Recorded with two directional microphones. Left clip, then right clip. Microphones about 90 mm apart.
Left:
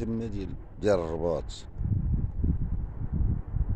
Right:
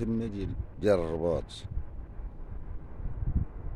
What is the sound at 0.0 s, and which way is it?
Speech, 25° right (ahead or behind).